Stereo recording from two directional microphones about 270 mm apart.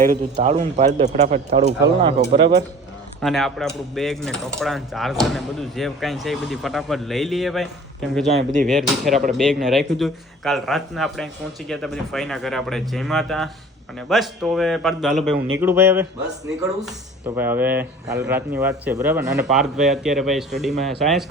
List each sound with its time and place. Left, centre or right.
0.0 s speech: right
3.2 s speech: centre
8.3 s speech: right
8.6 s speech: centre
15.6 s a sound: centre
16.6 s speech: centre